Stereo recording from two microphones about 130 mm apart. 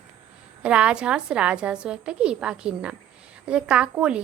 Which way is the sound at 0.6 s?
10° right (ahead or behind).